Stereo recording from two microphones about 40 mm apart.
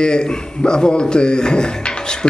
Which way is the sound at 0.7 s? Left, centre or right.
Left.